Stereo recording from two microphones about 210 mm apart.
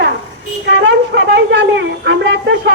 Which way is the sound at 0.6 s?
60° right (ahead or behind).